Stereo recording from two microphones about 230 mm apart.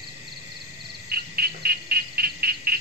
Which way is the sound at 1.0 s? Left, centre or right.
Right.